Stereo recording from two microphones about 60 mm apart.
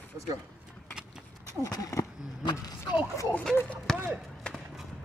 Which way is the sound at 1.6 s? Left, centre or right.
Left.